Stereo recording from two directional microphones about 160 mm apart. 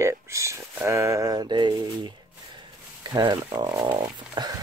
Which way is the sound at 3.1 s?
25° right (ahead or behind).